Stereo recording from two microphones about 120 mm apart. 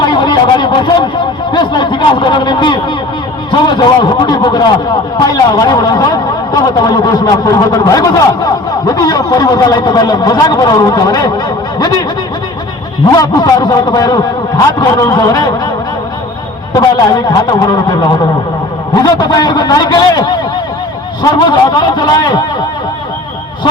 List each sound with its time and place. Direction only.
0.0 s a sound: 40° left (ahead or behind)
3.5 s a man's voice: 40° left (ahead or behind)
13.1 s speech: 35° left (ahead or behind)
16.7 s speech: 35° left (ahead or behind)